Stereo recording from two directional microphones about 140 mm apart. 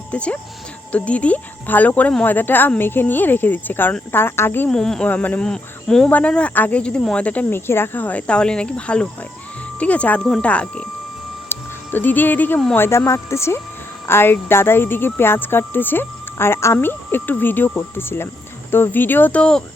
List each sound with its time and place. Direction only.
0.1 s speech: 10° left (ahead or behind)